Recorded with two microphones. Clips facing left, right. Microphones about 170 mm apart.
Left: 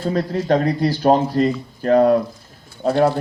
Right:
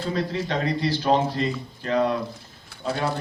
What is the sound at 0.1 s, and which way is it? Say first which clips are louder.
Speech: left 8 dB; 45° left (ahead or behind).